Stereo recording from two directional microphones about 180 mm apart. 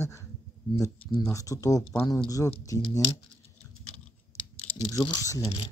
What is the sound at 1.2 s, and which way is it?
Speech, 20° left (ahead or behind).